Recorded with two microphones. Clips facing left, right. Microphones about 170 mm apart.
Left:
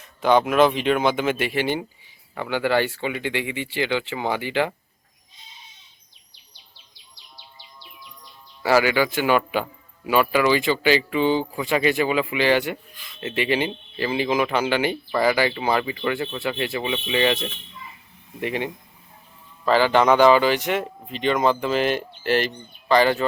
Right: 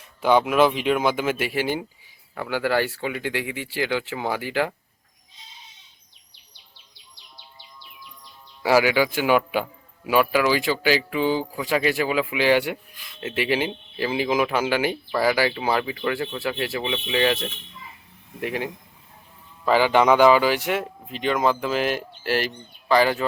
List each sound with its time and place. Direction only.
0.0 s speech: 10° right (ahead or behind)
6.3 s bird vocalization: 60° right (ahead or behind)
8.6 s speech: 10° right (ahead or behind)
19.6 s speech: 10° right (ahead or behind)